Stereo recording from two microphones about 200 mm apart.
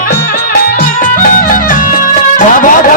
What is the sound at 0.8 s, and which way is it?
Music, 40° left (ahead or behind).